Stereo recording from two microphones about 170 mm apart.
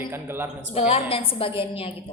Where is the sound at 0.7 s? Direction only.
35° left (ahead or behind).